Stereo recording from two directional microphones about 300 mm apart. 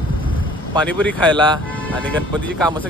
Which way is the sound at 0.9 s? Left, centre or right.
Centre.